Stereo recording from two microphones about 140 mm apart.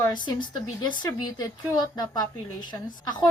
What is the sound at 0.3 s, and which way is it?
A woman's voice, 35° left (ahead or behind).